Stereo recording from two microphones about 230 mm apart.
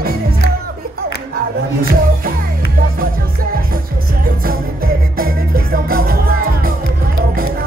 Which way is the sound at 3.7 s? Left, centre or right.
Right.